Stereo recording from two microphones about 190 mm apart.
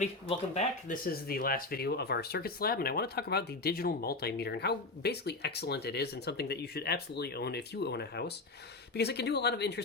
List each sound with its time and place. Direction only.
0.0 s speech: 35° left (ahead or behind)
1.0 s speech: 50° left (ahead or behind)